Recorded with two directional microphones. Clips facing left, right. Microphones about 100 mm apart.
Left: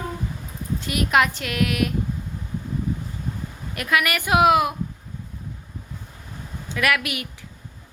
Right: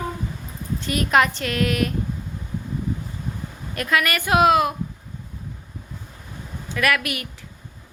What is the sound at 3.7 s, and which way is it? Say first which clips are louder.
A woman's voice: right 1 dB; 10° left (ahead or behind).